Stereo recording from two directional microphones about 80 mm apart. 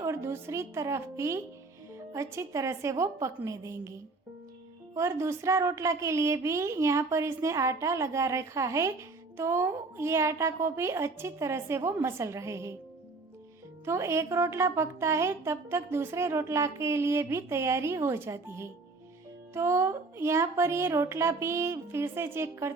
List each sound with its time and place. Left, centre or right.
0.0 s speech: right
4.9 s speech: right
13.8 s speech: right